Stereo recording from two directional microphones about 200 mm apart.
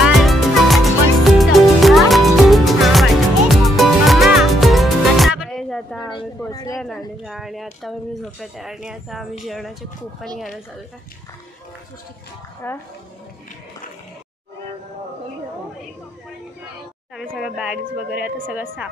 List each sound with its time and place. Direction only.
0.0 s music: centre (ahead or behind)
6.4 s a sound: 15° left (ahead or behind)
7.2 s a sound: centre (ahead or behind)
7.8 s speech: centre (ahead or behind)
12.6 s speech: 10° left (ahead or behind)
17.3 s a woman's voice: 5° right (ahead or behind)